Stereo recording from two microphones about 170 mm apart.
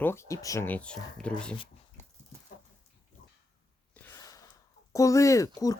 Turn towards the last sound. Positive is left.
turn(degrees=20)  # may be behind; listen again after turning